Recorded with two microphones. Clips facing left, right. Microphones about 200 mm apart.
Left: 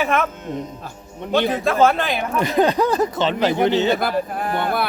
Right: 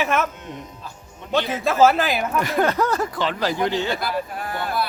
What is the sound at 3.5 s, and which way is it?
Speech, 65° left (ahead or behind).